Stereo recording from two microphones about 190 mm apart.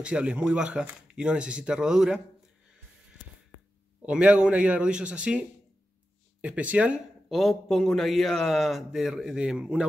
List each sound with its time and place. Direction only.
0.0 s speech: 5° right (ahead or behind)
4.0 s speech: 5° right (ahead or behind)